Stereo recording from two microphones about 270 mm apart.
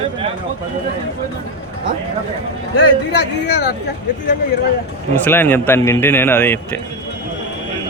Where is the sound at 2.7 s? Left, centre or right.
Left.